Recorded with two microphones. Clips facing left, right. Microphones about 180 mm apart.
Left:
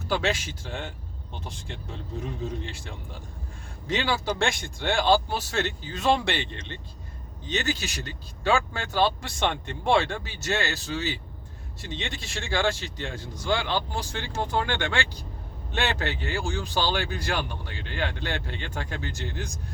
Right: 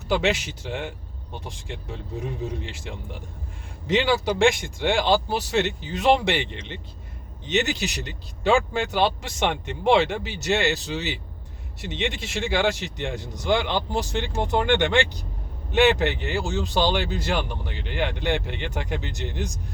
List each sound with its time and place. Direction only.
0.1 s speech: 20° right (ahead or behind)